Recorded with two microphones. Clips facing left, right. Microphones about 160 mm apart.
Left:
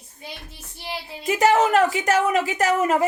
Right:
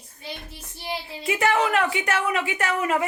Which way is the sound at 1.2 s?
40° left (ahead or behind).